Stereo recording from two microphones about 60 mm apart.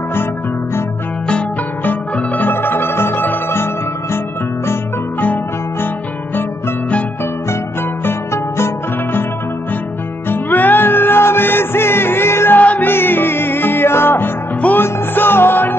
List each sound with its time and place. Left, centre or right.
1.9 s music: left
5.2 s music: left
8.0 s music: left
10.3 s music: left
12.5 s music: left
12.9 s music: left